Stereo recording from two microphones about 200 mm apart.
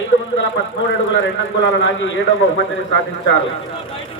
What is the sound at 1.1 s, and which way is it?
Speech, 70° left (ahead or behind).